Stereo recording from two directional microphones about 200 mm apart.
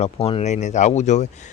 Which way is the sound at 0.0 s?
30° left (ahead or behind).